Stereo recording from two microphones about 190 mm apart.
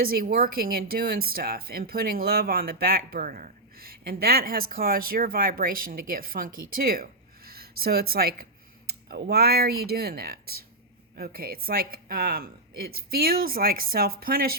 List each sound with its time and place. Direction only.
0.0 s speech: 50° right (ahead or behind)